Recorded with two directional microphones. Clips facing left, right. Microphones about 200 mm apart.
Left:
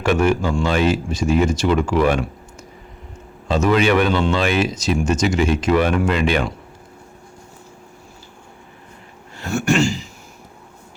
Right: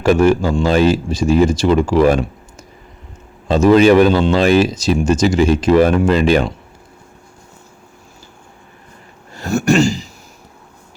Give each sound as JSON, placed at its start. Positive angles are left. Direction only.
{"t": 0.0, "sound": "speech", "side_deg": -35}
{"t": 9.3, "sound": "throat clearing", "side_deg": -40}